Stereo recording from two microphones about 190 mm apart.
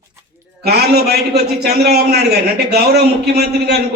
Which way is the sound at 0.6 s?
60° right (ahead or behind).